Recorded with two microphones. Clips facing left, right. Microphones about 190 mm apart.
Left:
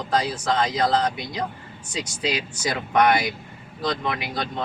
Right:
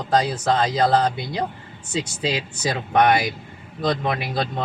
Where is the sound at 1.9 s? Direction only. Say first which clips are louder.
Right 3 dB; 30° right (ahead or behind).